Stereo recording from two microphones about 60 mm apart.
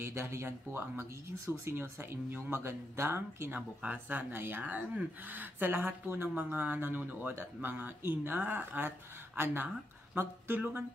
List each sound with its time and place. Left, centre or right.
0.0 s speech: right